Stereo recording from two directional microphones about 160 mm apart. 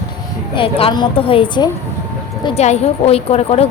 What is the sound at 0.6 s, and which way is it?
A woman's voice, 35° left (ahead or behind).